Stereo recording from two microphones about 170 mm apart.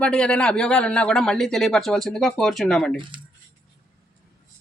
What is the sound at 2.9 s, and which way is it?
Speech, 30° right (ahead or behind).